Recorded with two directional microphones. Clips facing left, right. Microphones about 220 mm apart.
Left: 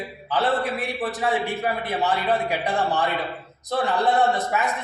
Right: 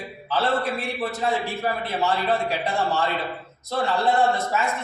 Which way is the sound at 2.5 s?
15° left (ahead or behind).